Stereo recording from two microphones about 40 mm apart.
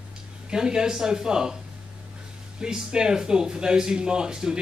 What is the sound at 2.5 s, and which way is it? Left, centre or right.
Speech, centre.